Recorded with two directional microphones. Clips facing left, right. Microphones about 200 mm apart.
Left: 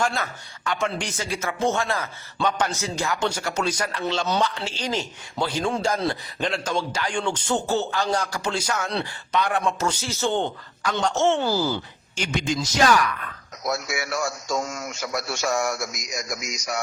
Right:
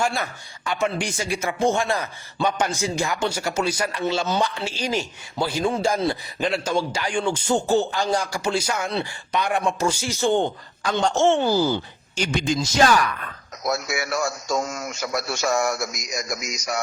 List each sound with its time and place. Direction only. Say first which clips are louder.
0.0 s a man's voice: right 1 dB; 10° right (ahead or behind)
10.8 s speech: right 2 dB; 25° right (ahead or behind)
11.3 s a man's voice: right 3 dB; 20° right (ahead or behind)
12.1 s a sound: right 2 dB; 35° right (ahead or behind)
12.5 s speech: right 1 dB; 30° right (ahead or behind)
13.7 s a sound: right 2 dB; 40° right (ahead or behind)